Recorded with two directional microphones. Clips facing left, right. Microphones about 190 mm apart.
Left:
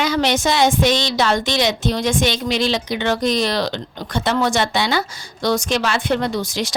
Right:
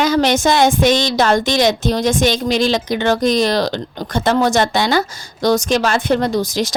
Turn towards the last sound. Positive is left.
turn(degrees=-40)  # may be behind; listen again after turning